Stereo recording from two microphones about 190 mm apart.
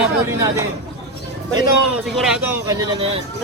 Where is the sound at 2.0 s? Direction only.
Centre (ahead or behind).